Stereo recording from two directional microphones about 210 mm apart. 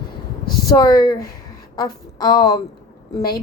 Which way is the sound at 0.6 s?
15° left (ahead or behind).